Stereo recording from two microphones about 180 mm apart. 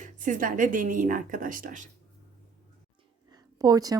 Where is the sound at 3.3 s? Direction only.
20° right (ahead or behind).